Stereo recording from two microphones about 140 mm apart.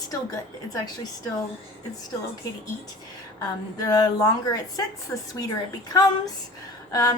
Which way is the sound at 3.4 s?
25° left (ahead or behind).